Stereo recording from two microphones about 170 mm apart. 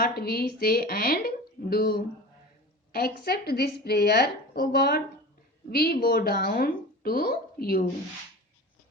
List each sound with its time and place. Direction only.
0.0 s a woman's voice: 65° left (ahead or behind)